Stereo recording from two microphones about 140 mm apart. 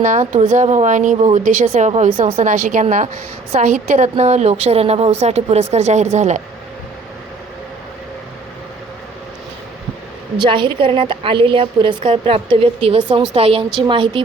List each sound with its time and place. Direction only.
0.0 s a woman's voice: 60° right (ahead or behind)
10.4 s a woman's voice: 35° right (ahead or behind)